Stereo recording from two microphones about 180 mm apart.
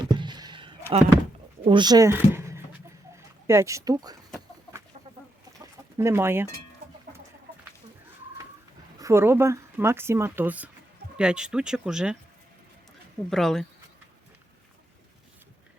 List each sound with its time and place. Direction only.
0.0 s a sound: 25° right (ahead or behind)
1.6 s speech: 25° right (ahead or behind)
6.0 s speech: 15° right (ahead or behind)
9.0 s speech: 15° right (ahead or behind)
13.3 s speech: centre (ahead or behind)